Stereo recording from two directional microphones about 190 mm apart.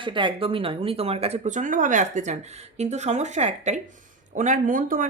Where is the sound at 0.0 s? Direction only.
25° right (ahead or behind).